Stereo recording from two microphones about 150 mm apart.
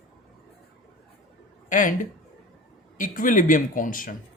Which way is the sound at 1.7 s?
65° left (ahead or behind).